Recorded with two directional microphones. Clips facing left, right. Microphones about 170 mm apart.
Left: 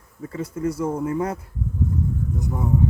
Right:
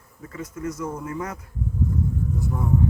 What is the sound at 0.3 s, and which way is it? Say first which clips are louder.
Speech: left 5 dB; 30° left (ahead or behind).